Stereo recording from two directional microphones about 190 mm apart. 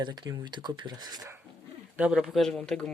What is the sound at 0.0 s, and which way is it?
Speech, 20° right (ahead or behind).